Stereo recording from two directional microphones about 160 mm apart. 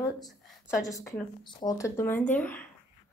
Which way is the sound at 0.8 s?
20° left (ahead or behind).